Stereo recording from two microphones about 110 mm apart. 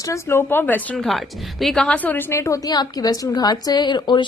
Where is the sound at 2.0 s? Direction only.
15° left (ahead or behind).